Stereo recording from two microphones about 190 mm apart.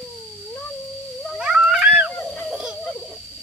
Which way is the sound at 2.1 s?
5° left (ahead or behind).